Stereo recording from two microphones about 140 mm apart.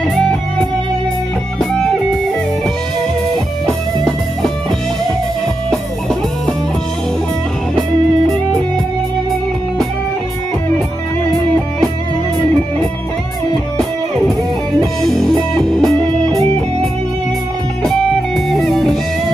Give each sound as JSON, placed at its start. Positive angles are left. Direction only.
{"t": 0.1, "sound": "music", "side_deg": 10}
{"t": 3.6, "sound": "music", "side_deg": 0}
{"t": 15.0, "sound": "music", "side_deg": 5}
{"t": 17.8, "sound": "music", "side_deg": 0}